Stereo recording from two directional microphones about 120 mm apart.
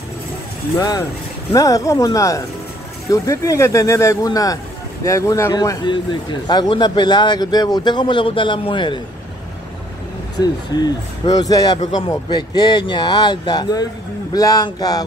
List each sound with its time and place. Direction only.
0.7 s a man's voice: 30° left (ahead or behind)
10.4 s a man's voice: 35° left (ahead or behind)